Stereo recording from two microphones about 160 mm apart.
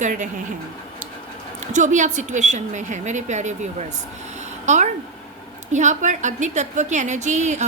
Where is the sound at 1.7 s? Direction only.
50° right (ahead or behind).